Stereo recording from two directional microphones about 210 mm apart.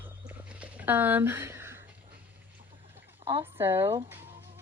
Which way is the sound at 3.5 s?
10° right (ahead or behind).